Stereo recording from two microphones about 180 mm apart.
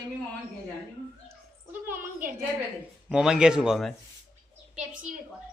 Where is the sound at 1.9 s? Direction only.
50° right (ahead or behind).